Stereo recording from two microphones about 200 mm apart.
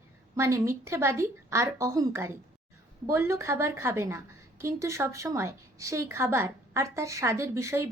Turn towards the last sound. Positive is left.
turn(degrees=-15)  # may be behind; listen again after turning